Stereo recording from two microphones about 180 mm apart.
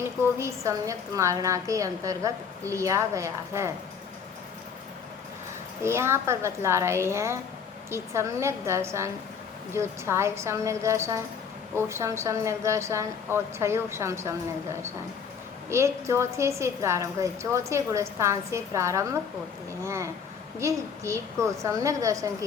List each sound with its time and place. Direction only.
0.3 s a woman's voice: 15° right (ahead or behind)
5.8 s a woman's voice: 15° right (ahead or behind)